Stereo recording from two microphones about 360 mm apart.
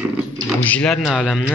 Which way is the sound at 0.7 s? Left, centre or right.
Centre.